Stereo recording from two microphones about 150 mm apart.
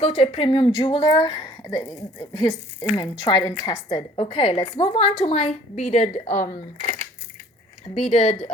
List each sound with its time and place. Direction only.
0.0 s a woman's voice: 30° left (ahead or behind); by 7.0 s 60° left (ahead or behind)
8.1 s a woman's voice: 40° left (ahead or behind)